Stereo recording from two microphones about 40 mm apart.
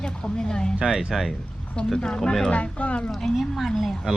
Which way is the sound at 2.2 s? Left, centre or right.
Centre.